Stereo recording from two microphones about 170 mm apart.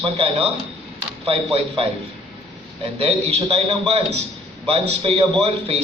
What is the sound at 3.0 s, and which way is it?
A man's voice, 35° right (ahead or behind).